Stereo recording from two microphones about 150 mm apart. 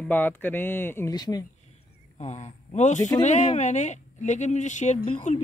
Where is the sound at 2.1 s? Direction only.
50° left (ahead or behind).